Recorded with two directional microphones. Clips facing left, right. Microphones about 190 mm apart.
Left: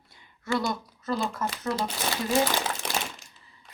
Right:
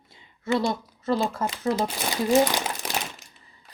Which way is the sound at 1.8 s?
15° right (ahead or behind).